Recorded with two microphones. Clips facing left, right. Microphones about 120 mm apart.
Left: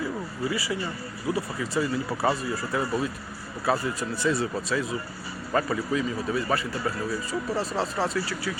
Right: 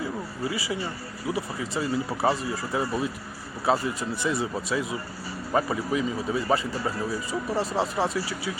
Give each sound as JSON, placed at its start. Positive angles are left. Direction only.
{"t": 0.5, "sound": "speech", "side_deg": -20}